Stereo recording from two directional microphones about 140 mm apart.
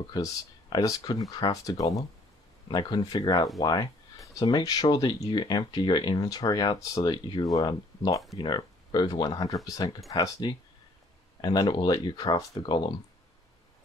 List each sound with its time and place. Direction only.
0.0 s speech: 30° left (ahead or behind)